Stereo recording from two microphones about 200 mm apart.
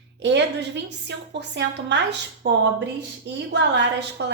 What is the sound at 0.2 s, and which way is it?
A woman's voice, 60° right (ahead or behind).